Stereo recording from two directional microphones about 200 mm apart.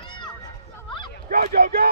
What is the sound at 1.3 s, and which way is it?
Speech, 50° right (ahead or behind).